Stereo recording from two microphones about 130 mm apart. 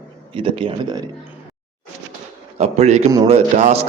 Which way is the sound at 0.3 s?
45° right (ahead or behind).